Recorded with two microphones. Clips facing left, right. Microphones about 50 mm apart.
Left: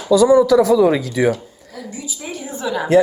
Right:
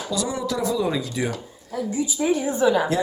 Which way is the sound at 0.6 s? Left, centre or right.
Left.